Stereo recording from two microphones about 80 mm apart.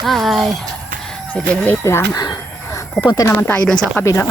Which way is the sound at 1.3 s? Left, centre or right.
Centre.